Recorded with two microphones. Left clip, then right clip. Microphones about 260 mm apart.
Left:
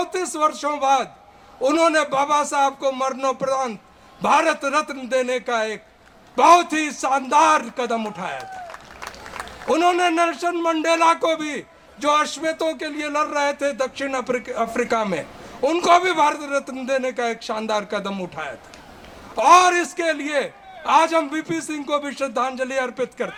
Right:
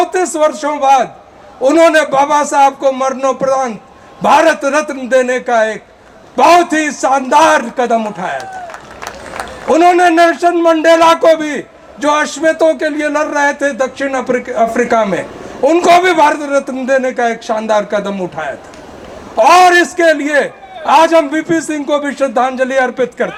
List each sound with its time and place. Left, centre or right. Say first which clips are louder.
0.0 s a man's voice: right 10 dB; left
9.6 s a man's voice: right 10 dB; left
10.2 s a man's voice: right 12 dB; centre
16.0 s a man's voice: right 9 dB; centre